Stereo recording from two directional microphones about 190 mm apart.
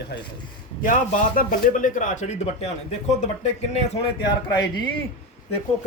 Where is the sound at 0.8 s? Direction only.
45° left (ahead or behind).